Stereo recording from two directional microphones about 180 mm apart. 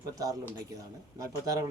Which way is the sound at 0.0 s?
20° right (ahead or behind).